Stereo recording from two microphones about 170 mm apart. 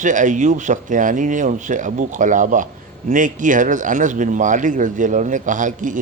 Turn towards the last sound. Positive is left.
turn(degrees=-50)  # may be behind; listen again after turning